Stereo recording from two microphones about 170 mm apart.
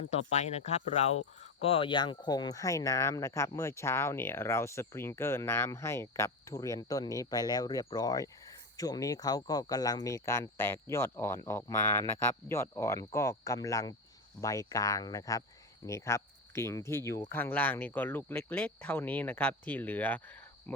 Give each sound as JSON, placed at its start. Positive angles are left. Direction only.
{"t": 0.1, "sound": "speech", "side_deg": 40}
{"t": 20.7, "sound": "cricket", "side_deg": 10}